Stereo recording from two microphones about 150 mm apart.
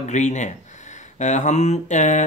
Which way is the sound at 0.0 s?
50° left (ahead or behind).